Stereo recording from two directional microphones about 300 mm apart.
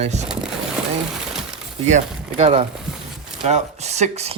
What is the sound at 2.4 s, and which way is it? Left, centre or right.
Speech, centre.